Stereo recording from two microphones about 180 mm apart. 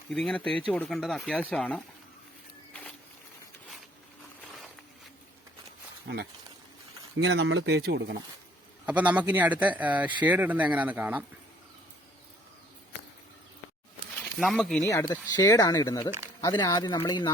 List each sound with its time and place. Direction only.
0.1 s speech: 5° left (ahead or behind)
7.2 s speech: 75° right (ahead or behind)
8.9 s speech: 10° right (ahead or behind)
14.3 s speech: centre (ahead or behind)
14.8 s speech: 20° left (ahead or behind)